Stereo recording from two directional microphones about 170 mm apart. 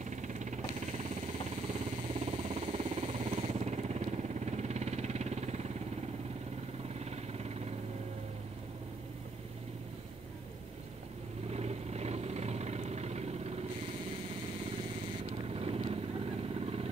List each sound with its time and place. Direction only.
0.0 s vehicle: 45° right (ahead or behind)
7.1 s vehicle: 40° right (ahead or behind)
11.5 s vehicle: 40° right (ahead or behind)
15.4 s vehicle: 35° right (ahead or behind)